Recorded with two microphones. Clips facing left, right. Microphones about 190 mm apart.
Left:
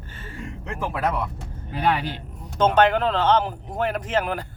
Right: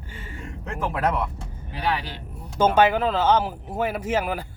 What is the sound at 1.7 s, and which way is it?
Speech, 50° left (ahead or behind).